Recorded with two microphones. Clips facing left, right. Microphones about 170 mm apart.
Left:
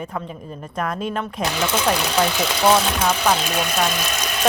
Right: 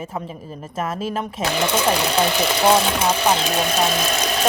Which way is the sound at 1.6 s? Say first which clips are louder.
Right 2 dB; 15° right (ahead or behind).